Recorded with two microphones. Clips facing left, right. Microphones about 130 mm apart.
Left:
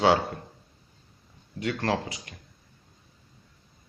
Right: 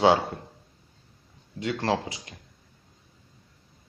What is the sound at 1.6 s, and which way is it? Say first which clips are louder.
Speech: right 1 dB; 20° right (ahead or behind).